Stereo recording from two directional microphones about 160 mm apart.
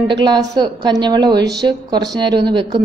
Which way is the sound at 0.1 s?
25° right (ahead or behind).